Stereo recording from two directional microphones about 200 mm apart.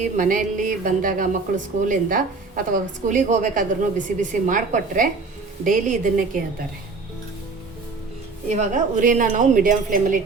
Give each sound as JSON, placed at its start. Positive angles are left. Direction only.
{"t": 0.0, "sound": "speech", "side_deg": -40}
{"t": 8.4, "sound": "speech", "side_deg": -40}